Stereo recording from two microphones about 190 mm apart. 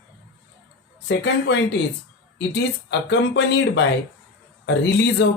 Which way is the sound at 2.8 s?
70° left (ahead or behind).